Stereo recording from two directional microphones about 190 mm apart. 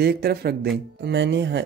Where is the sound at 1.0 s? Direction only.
65° right (ahead or behind).